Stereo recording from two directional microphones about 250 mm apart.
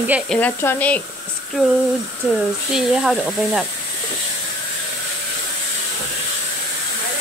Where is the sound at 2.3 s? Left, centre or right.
Centre.